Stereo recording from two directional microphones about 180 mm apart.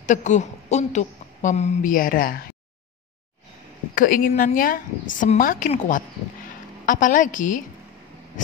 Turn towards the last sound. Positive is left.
turn(degrees=45)  # may be behind; listen again after turning